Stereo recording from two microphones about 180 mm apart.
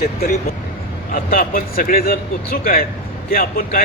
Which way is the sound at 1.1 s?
50° left (ahead or behind).